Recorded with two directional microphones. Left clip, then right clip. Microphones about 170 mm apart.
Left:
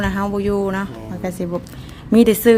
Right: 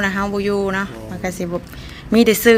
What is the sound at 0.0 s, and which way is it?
A woman's voice, 20° left (ahead or behind).